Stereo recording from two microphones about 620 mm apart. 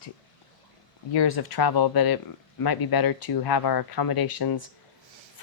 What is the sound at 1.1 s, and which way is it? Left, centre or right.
Speech, left.